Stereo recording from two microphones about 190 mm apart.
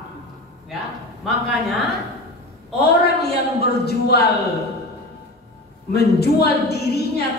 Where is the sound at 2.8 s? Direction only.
60° left (ahead or behind).